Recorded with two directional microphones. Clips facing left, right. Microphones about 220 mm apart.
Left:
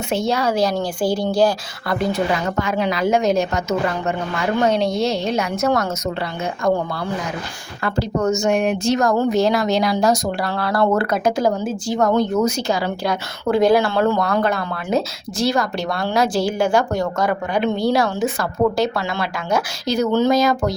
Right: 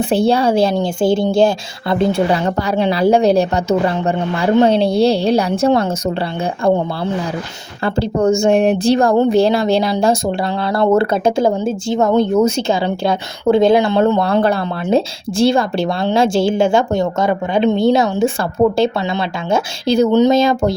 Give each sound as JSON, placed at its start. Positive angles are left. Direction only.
{"t": 0.1, "sound": "a woman's voice", "side_deg": -30}